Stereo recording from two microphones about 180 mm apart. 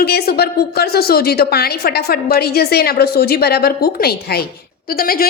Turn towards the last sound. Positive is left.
turn(degrees=55)  # may be behind; listen again after turning